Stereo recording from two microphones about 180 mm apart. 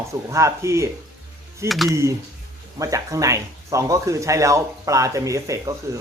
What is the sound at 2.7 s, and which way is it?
Speech, 20° right (ahead or behind).